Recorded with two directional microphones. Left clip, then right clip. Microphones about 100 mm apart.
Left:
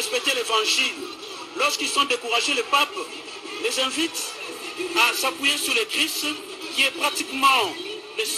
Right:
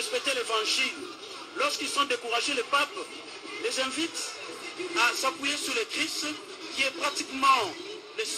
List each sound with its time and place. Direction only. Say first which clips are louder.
0.1 s a man's voice: left 6 dB; 30° left (ahead or behind)
5.2 s a man's voice: left 6 dB; 35° left (ahead or behind)